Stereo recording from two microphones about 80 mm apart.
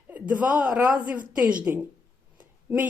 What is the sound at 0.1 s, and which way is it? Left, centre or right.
A woman's voice, centre.